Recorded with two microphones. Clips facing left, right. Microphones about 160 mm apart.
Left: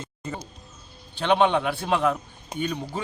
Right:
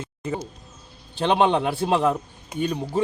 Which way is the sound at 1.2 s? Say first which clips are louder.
Right 1 dB; 35° right (ahead or behind).